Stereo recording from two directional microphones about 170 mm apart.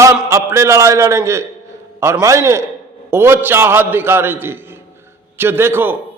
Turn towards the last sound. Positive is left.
turn(degrees=-15)  # may be behind; listen again after turning